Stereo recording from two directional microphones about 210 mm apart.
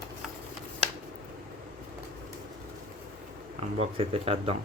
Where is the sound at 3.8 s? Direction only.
30° right (ahead or behind).